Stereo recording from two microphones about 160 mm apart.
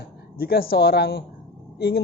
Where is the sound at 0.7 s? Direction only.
85° left.